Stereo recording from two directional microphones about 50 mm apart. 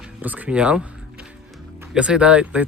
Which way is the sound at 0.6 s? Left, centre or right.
Right.